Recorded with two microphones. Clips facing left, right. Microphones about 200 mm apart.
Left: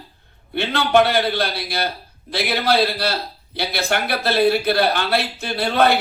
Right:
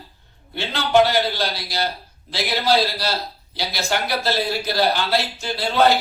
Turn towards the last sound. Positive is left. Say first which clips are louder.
# left 1 dB
turn(degrees=60)  # may be behind; listen again after turning